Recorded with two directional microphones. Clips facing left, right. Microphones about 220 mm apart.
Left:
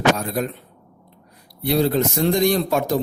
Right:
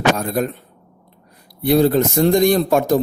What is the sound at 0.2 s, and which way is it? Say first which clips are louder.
Speech: right 4 dB; 50° right (ahead or behind).